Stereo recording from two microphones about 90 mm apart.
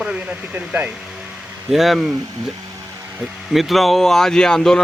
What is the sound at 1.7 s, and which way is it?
Speech, 5° right (ahead or behind).